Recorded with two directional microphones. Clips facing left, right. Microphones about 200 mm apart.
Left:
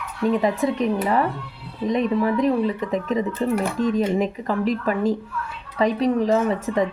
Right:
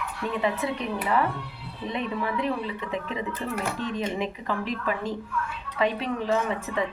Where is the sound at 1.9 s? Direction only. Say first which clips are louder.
Left 9 dB; 40° left (ahead or behind).